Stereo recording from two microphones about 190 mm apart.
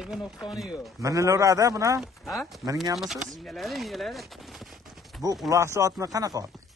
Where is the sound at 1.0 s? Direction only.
15° right (ahead or behind).